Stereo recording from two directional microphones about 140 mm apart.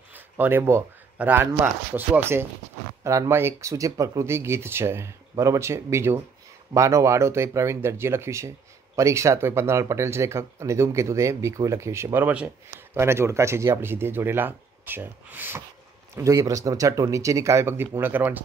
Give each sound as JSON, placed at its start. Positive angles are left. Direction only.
{"t": 0.1, "sound": "speech", "side_deg": -15}